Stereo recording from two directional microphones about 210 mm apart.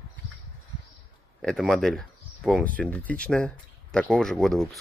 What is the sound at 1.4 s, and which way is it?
Speech, centre (ahead or behind).